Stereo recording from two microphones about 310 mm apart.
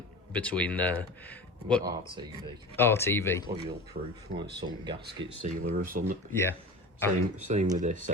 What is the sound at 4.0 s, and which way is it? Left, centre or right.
Speech, right.